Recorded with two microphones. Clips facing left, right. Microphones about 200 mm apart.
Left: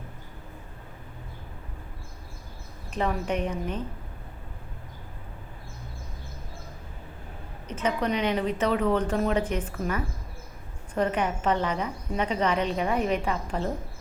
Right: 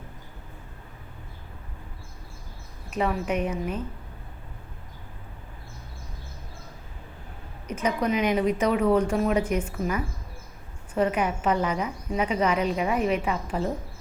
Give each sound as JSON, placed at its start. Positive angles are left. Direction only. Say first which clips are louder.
{"t": 2.9, "sound": "a woman's voice", "louder": "right 2 dB", "side_deg": -5}
{"t": 7.7, "sound": "a woman's voice", "louder": "right 2 dB", "side_deg": -10}